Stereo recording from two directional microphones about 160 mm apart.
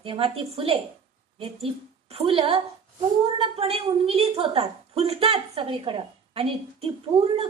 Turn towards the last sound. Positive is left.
turn(degrees=-35)  # may be behind; listen again after turning